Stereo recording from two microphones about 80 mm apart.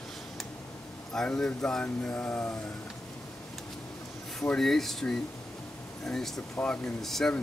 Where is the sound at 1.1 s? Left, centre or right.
Centre.